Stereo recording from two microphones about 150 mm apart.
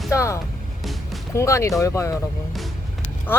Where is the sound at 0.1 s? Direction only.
20° left (ahead or behind).